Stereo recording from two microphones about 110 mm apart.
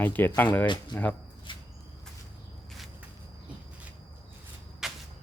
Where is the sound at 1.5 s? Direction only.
50° left (ahead or behind).